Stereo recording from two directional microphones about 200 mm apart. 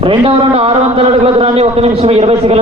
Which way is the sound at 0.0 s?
25° right (ahead or behind).